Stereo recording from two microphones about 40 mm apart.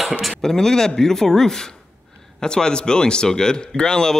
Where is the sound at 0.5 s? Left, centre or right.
Centre.